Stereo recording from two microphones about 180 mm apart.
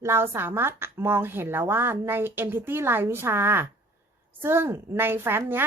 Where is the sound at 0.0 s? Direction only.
15° right (ahead or behind).